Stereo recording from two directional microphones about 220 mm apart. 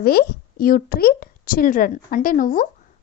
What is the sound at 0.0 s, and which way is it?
A woman's voice, 45° left (ahead or behind).